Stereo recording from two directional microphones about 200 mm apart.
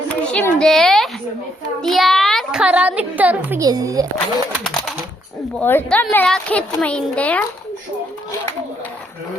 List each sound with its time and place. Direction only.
0.3 s a child's voice: 5° left (ahead or behind); by 4.4 s 15° right (ahead or behind)
4.5 s a child's voice: centre (ahead or behind)